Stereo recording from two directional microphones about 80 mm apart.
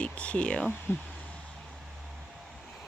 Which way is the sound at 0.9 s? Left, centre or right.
Left.